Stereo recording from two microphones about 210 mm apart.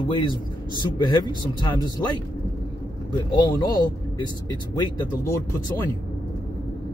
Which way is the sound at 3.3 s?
20° left (ahead or behind).